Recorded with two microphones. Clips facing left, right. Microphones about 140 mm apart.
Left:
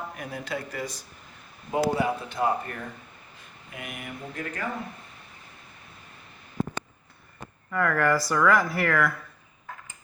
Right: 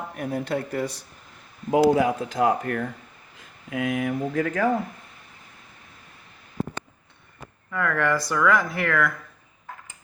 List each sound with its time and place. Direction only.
0.2 s speech: 55° right (ahead or behind)
1.7 s speech: 90° right
3.7 s speech: 90° right
7.7 s speech: centre (ahead or behind)